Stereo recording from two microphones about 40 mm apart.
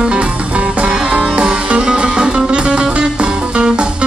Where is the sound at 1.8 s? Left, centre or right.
Centre.